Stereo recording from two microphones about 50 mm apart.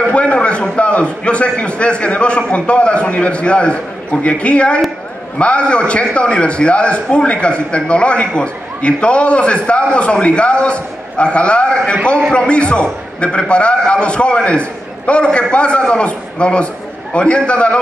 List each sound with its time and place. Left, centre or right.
0.0 s a man's voice: left